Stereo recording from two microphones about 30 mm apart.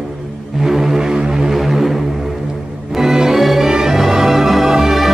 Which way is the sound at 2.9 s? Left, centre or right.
Centre.